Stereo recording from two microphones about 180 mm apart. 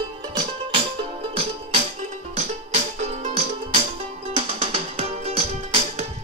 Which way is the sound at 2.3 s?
40° right (ahead or behind).